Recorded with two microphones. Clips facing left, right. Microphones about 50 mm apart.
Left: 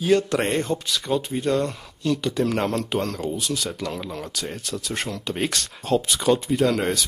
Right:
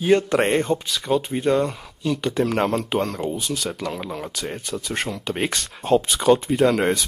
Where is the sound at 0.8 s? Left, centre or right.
Centre.